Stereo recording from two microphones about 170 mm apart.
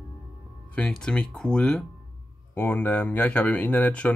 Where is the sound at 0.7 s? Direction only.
5° left (ahead or behind).